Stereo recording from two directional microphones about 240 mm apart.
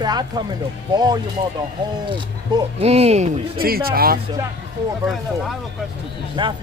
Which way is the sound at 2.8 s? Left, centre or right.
Right.